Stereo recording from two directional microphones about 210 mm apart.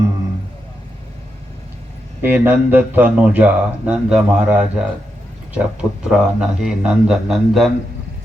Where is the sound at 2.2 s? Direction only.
10° right (ahead or behind).